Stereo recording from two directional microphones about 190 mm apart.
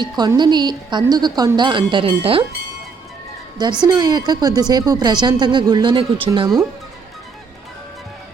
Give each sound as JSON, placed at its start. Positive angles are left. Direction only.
{"t": 0.0, "sound": "a woman's voice", "side_deg": -20}
{"t": 3.6, "sound": "a woman's voice", "side_deg": -20}